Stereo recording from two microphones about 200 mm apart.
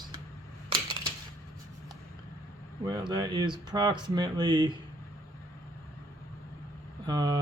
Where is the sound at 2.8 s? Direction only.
20° right (ahead or behind).